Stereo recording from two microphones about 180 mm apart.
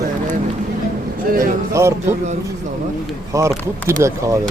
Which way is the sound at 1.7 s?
15° right (ahead or behind).